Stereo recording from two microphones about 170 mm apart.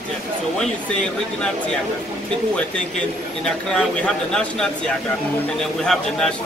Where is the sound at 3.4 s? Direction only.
5° left (ahead or behind).